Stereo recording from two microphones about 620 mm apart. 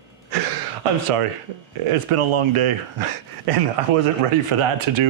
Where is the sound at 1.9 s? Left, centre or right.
Right.